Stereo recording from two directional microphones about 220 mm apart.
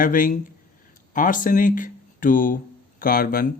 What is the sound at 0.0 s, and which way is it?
Speech, 40° left (ahead or behind).